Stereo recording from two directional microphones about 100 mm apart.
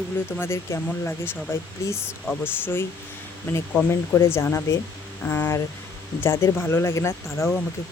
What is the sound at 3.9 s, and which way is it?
Speech, 25° left (ahead or behind).